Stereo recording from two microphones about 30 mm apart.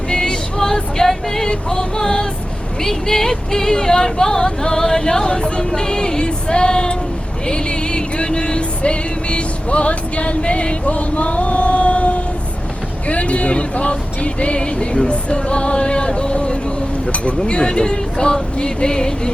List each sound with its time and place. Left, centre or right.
0.1 s music: centre
1.5 s speech: left
7.4 s vehicle: left
18.5 s speech: left